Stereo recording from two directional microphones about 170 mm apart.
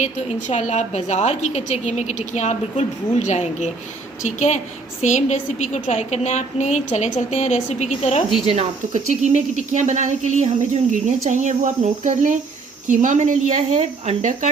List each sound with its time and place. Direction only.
0.0 s a woman's voice: 45° left (ahead or behind)
8.4 s speech: 40° right (ahead or behind)